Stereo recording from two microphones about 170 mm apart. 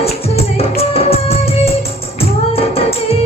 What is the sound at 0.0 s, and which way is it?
Music, 35° left (ahead or behind).